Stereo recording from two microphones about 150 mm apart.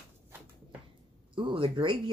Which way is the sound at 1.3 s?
35° right (ahead or behind).